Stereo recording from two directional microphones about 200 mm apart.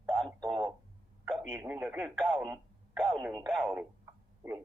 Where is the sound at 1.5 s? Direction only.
10° right (ahead or behind).